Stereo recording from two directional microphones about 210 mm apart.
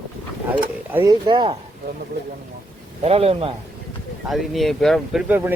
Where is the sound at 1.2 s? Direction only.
20° right (ahead or behind).